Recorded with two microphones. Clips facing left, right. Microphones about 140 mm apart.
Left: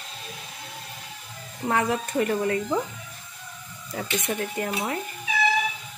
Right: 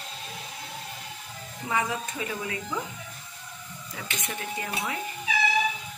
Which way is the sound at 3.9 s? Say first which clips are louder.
Left 8 dB; 40° left (ahead or behind).